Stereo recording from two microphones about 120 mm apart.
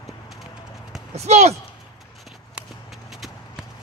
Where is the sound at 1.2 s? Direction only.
65° right (ahead or behind).